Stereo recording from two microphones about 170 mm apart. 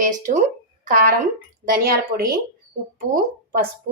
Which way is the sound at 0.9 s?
55° right (ahead or behind).